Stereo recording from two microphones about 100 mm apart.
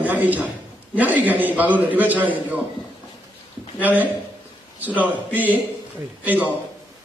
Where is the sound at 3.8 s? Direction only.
15° right (ahead or behind).